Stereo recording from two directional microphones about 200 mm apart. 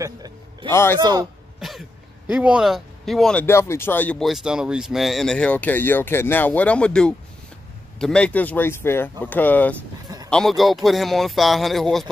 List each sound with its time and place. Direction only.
0.0 s a sound: 20° right (ahead or behind)
0.7 s speech: 15° left (ahead or behind)
0.9 s a man's voice: 20° right (ahead or behind)
1.6 s speech: centre (ahead or behind)
10.0 s a sound: 20° right (ahead or behind)
10.3 s speech: centre (ahead or behind)